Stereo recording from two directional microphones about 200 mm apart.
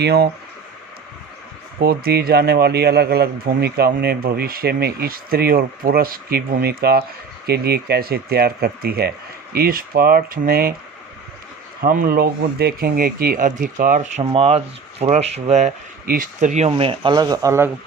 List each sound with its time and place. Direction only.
0.0 s a man's voice: 55° right (ahead or behind)
1.8 s a man's voice: 50° right (ahead or behind)
11.8 s a man's voice: 45° right (ahead or behind)
14.3 s speech: 30° right (ahead or behind); by 17.7 s 15° right (ahead or behind)